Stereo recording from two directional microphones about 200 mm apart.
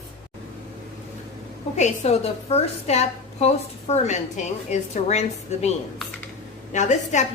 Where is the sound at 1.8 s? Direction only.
30° left (ahead or behind).